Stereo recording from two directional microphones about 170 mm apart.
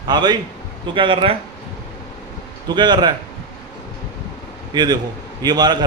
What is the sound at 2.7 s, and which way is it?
Speech, 25° right (ahead or behind).